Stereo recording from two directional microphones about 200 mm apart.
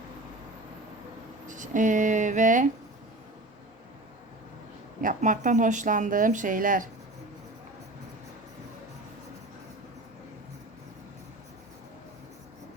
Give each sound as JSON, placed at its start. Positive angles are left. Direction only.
{"t": 1.5, "sound": "speech", "side_deg": -40}
{"t": 4.9, "sound": "speech", "side_deg": -40}